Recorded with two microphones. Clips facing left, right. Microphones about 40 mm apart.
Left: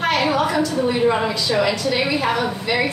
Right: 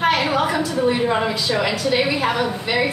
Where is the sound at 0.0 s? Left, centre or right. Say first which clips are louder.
Right 1 dB; centre.